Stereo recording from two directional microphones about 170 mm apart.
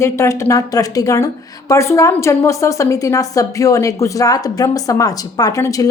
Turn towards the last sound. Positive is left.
turn(degrees=20)  # may be behind; listen again after turning